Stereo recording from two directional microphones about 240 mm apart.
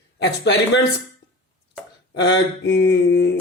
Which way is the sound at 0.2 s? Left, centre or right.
Left.